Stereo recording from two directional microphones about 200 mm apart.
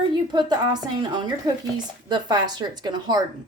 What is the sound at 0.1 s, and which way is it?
A woman's voice, 20° right (ahead or behind).